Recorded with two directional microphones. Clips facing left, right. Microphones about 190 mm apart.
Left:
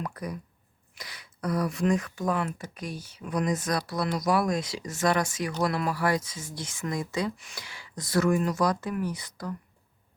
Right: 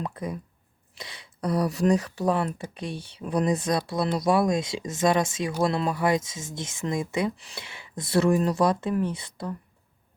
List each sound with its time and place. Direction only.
0.0 s speech: 25° right (ahead or behind)